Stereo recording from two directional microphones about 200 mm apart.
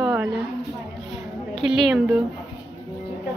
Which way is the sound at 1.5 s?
Centre (ahead or behind).